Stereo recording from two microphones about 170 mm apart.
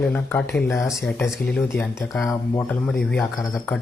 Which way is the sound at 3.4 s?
20° left (ahead or behind).